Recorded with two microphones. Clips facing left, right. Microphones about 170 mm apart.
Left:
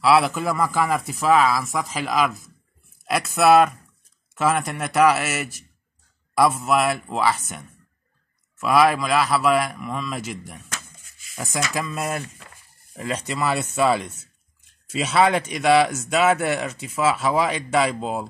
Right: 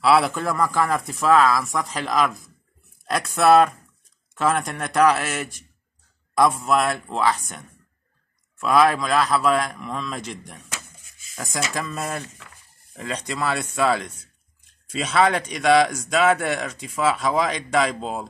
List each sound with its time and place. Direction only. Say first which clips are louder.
0.0 s a man's voice: even; centre (ahead or behind)
11.7 s a man's voice: left 2 dB; centre (ahead or behind)